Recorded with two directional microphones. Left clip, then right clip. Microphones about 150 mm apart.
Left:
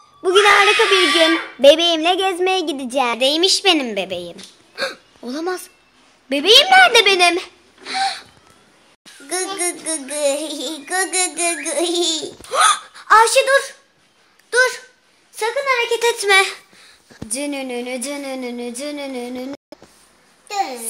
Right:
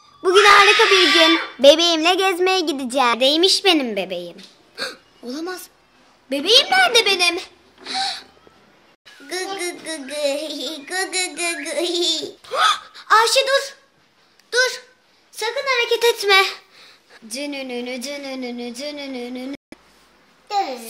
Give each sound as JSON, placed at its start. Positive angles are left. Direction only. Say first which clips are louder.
{"t": 0.2, "sound": "a sound", "louder": "right 1 dB", "side_deg": -10}
{"t": 1.1, "sound": "speech", "louder": "right 1 dB", "side_deg": -10}
{"t": 4.2, "sound": "a child's voice", "louder": "left 2 dB", "side_deg": 25}
{"t": 9.6, "sound": "music", "louder": "left 3 dB", "side_deg": 35}
{"t": 12.4, "sound": "speech", "louder": "left 3 dB", "side_deg": 15}
{"t": 12.9, "sound": "speech", "louder": "left 4 dB", "side_deg": 40}
{"t": 14.5, "sound": "a sound", "louder": "left 3 dB", "side_deg": 45}
{"t": 15.3, "sound": "a woman's voice", "louder": "left 2 dB", "side_deg": 45}
{"t": 15.9, "sound": "a child's voice", "louder": "right 1 dB", "side_deg": 5}
{"t": 17.3, "sound": "music", "louder": "left 3 dB", "side_deg": 40}